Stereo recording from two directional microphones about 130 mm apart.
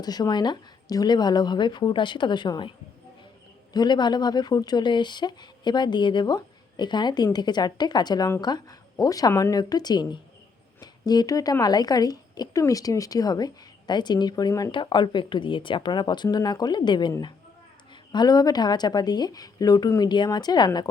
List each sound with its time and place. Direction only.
0.0 s speech: 30° left (ahead or behind)